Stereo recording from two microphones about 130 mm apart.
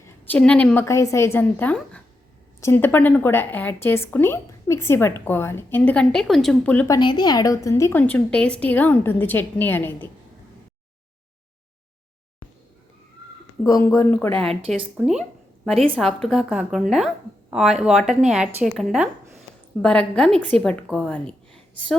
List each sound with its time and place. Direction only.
0.0 s a woman's voice: 10° left (ahead or behind)
0.9 s a woman's voice: 20° left (ahead or behind); by 6.6 s centre (ahead or behind)
7.0 s a woman's voice: 35° left (ahead or behind)
8.0 s a woman's voice: 10° left (ahead or behind)
13.8 s a woman's voice: 20° left (ahead or behind)
14.4 s a woman's voice: 5° left (ahead or behind)